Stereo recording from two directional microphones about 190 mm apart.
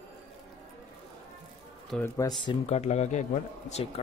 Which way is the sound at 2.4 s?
30° left (ahead or behind).